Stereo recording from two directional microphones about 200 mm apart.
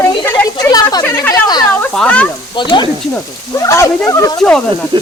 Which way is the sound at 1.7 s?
5° left (ahead or behind).